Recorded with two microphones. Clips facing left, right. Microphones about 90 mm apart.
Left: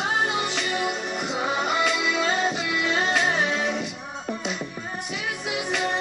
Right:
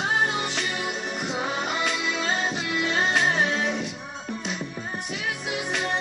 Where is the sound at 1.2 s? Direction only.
5° left (ahead or behind).